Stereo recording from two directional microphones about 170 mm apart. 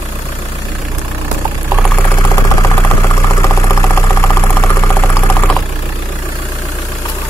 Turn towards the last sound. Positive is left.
turn(degrees=10)  # may be behind; listen again after turning